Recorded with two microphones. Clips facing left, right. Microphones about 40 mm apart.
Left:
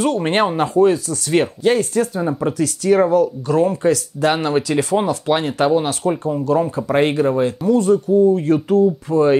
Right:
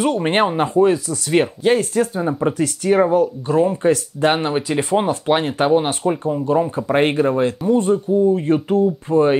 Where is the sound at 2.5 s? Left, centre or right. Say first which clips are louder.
Left 3 dB; right.